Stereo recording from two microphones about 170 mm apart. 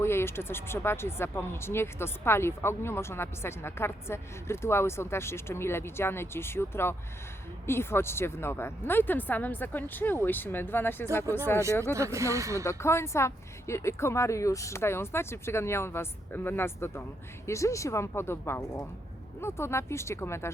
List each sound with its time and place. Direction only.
0.0 s speech: 15° left (ahead or behind)
11.8 s speech: 15° right (ahead or behind)
12.6 s speech: 15° left (ahead or behind)